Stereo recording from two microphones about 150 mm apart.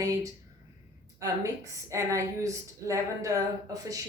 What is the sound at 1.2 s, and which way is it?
Speech, 20° right (ahead or behind).